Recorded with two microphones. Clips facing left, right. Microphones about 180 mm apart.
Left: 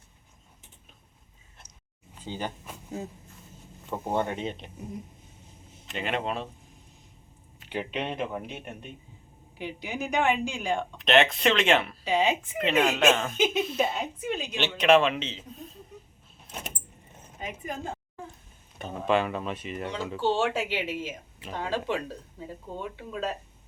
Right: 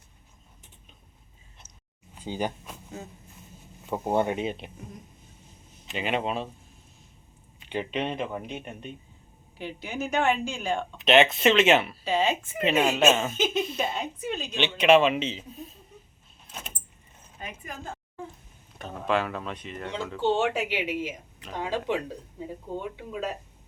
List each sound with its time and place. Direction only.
2.1 s speech: 15° right (ahead or behind)
3.8 s speech: 10° right (ahead or behind)
5.8 s speech: centre (ahead or behind)
7.6 s a woman's voice: 5° left (ahead or behind)
10.9 s speech: centre (ahead or behind)
12.0 s a woman's voice: 15° left (ahead or behind)
12.6 s speech: 5° right (ahead or behind)
13.3 s speech: 10° left (ahead or behind); by 15.7 s 10° right (ahead or behind)
18.8 s a woman's voice: centre (ahead or behind)
20.2 s speech: 20° right (ahead or behind)